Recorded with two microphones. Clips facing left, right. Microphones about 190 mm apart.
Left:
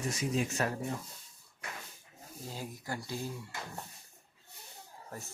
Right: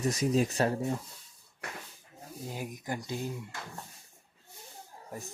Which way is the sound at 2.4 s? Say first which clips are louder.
Right 3 dB; 15° right (ahead or behind).